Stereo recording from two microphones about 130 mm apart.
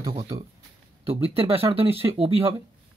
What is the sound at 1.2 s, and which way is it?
Speech, 45° right (ahead or behind).